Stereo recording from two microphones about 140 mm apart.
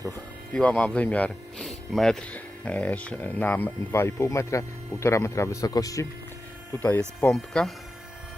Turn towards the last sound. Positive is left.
turn(degrees=5)  # may be behind; listen again after turning